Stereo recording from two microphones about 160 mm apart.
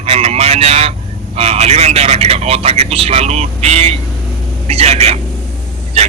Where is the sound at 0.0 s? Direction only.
40° right (ahead or behind).